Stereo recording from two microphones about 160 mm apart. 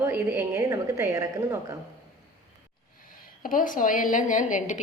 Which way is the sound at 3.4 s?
60° left (ahead or behind).